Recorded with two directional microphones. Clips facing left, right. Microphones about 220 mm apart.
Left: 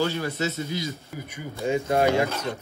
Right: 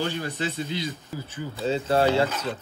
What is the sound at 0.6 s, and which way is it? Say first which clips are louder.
Speech: even; 20° right (ahead or behind).